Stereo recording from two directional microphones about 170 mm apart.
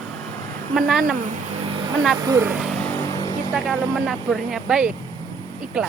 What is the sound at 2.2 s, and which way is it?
Speech, 15° right (ahead or behind).